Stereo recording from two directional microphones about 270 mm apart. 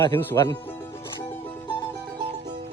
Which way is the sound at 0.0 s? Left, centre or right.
Centre.